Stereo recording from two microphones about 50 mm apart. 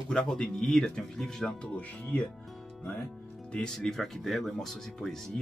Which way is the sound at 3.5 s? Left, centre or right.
Centre.